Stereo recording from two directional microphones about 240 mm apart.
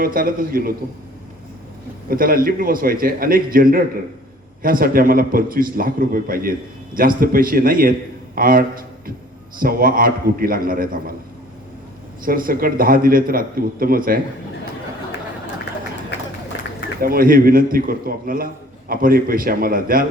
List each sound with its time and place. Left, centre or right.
0.0 s a man's voice: right
2.0 s a man's voice: right
12.2 s a man's voice: right
17.0 s a man's voice: right